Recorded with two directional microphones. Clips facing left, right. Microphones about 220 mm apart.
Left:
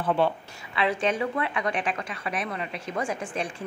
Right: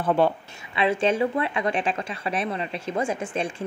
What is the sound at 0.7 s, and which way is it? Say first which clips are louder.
A woman's voice: right 4 dB; 25° right (ahead or behind).